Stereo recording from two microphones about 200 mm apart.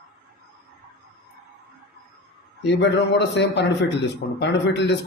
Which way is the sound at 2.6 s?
60° left (ahead or behind).